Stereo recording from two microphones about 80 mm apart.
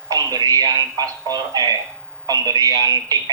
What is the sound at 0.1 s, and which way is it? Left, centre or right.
Speech, right.